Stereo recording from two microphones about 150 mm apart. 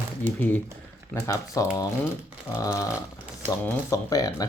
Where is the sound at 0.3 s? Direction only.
10° left (ahead or behind).